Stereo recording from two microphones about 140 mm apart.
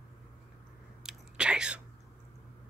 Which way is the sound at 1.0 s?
5° right (ahead or behind).